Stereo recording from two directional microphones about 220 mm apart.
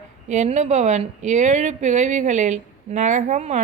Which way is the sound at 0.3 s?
30° right (ahead or behind).